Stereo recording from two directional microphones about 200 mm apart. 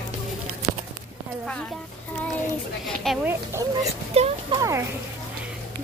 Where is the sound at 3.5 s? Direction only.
10° right (ahead or behind).